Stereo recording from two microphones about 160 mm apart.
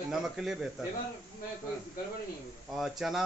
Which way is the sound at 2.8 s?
Centre (ahead or behind).